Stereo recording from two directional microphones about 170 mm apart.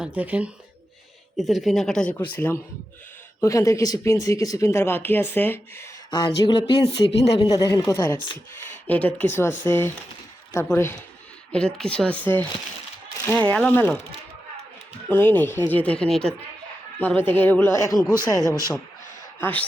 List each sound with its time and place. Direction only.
0.0 s speech: 10° right (ahead or behind); by 5.9 s 15° left (ahead or behind)
6.1 s speech: 25° left (ahead or behind)
15.1 s speech: 10° left (ahead or behind)
18.4 s speech: 20° right (ahead or behind)
19.4 s speech: 10° left (ahead or behind)